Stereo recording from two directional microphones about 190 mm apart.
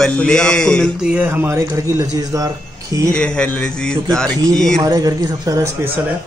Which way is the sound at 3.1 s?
5° left (ahead or behind).